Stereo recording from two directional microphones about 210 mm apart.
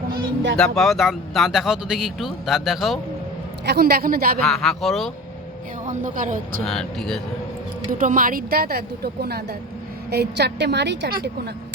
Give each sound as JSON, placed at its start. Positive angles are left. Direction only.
{"t": 0.5, "sound": "speech", "side_deg": 0}
{"t": 3.7, "sound": "a woman's voice", "side_deg": -50}
{"t": 4.4, "sound": "speech", "side_deg": 0}
{"t": 5.8, "sound": "speech", "side_deg": -40}
{"t": 6.7, "sound": "speech", "side_deg": 0}
{"t": 7.9, "sound": "a woman's voice", "side_deg": -40}